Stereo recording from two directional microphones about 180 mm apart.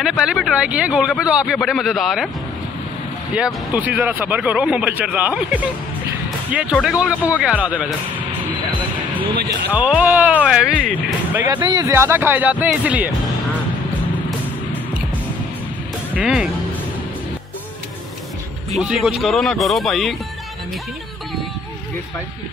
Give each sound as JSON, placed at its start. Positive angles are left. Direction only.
{"t": 0.0, "sound": "a man's voice", "side_deg": -5}
{"t": 3.3, "sound": "speech", "side_deg": -5}
{"t": 9.7, "sound": "speech", "side_deg": -5}
{"t": 11.6, "sound": "speech", "side_deg": -25}
{"t": 11.9, "sound": "speech", "side_deg": -15}
{"t": 16.1, "sound": "speech", "side_deg": -5}
{"t": 19.0, "sound": "a man's voice", "side_deg": 0}